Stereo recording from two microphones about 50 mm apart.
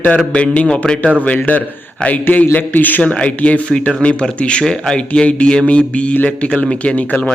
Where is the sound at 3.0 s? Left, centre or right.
Left.